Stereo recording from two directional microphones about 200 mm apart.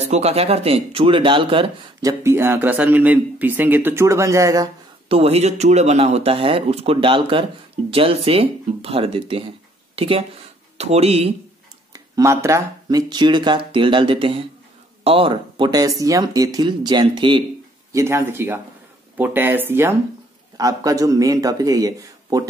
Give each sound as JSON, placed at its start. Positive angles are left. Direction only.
{"t": 0.0, "sound": "speech", "side_deg": -30}
{"t": 5.0, "sound": "speech", "side_deg": -30}
{"t": 11.9, "sound": "speech", "side_deg": -15}
{"t": 17.9, "sound": "speech", "side_deg": -10}